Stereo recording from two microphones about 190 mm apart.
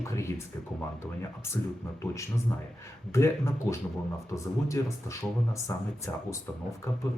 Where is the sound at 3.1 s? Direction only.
15° left (ahead or behind).